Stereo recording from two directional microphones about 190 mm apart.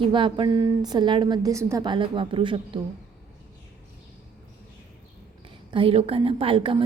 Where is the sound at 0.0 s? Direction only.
25° right (ahead or behind).